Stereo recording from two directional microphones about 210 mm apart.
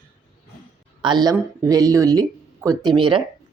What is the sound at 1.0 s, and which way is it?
Speech, 20° right (ahead or behind).